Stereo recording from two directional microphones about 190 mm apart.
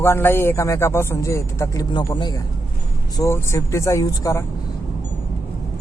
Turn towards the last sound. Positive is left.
turn(degrees=15)  # may be behind; listen again after turning